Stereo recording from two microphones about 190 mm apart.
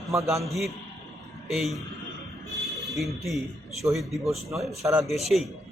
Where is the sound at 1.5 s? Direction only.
Centre (ahead or behind).